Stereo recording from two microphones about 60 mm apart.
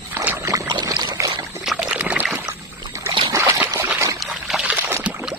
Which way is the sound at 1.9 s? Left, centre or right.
Right.